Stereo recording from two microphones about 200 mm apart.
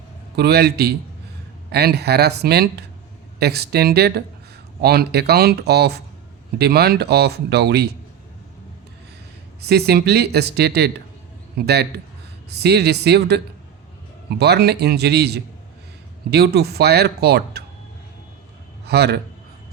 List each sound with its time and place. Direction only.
0.3 s speech: 55° right (ahead or behind)
9.6 s a man's voice: 55° right (ahead or behind)
18.9 s a man's voice: 55° right (ahead or behind)